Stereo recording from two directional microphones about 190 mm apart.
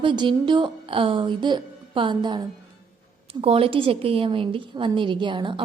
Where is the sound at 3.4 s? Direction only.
30° right (ahead or behind).